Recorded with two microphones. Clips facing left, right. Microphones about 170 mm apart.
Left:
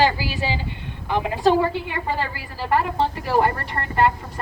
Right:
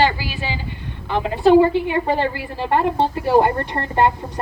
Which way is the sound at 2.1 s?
25° right (ahead or behind).